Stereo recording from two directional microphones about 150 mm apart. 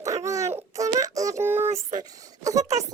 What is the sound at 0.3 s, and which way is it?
Child singing, 20° right (ahead or behind).